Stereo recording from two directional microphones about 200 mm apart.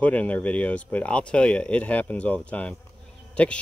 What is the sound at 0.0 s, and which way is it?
Speech, 5° left (ahead or behind).